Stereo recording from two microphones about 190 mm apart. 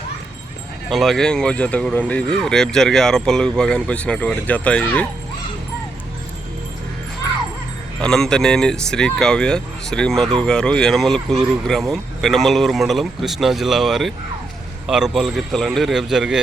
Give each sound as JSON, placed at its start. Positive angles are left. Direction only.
{"t": 0.9, "sound": "speech", "side_deg": 0}
{"t": 8.0, "sound": "speech", "side_deg": 5}